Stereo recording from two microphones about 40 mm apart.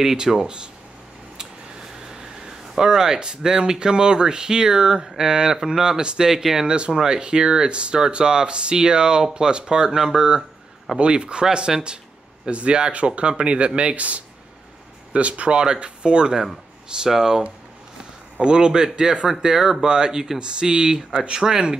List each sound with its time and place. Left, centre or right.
0.0 s speech: centre
17.1 s speech: centre
18.4 s speech: right
20.3 s speech: right